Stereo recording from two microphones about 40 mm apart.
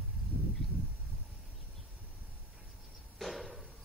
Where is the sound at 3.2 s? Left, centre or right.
Centre.